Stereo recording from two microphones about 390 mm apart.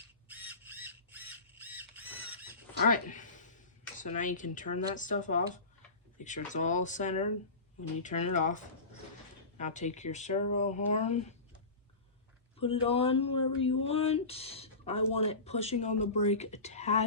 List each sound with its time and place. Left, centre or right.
0.3 s squawk: centre
2.8 s speech: centre
12.5 s speech: centre